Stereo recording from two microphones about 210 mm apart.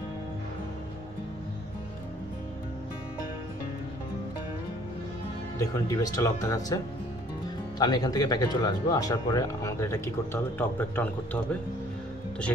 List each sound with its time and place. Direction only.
5.6 s speech: 15° left (ahead or behind)
7.8 s speech: 20° left (ahead or behind)